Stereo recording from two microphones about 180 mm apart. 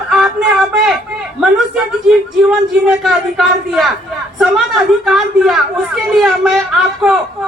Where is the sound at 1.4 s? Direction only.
5° right (ahead or behind).